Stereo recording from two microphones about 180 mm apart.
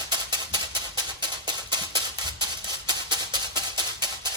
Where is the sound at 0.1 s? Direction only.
25° right (ahead or behind).